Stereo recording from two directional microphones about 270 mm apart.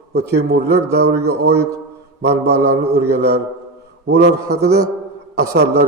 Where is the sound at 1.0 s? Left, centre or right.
Right.